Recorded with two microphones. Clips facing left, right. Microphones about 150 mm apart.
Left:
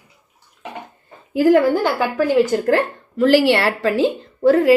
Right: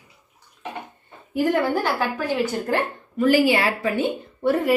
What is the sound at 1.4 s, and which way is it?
Speech, 90° left.